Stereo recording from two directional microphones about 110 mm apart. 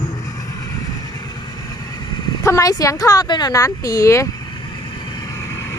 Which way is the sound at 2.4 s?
30° left (ahead or behind).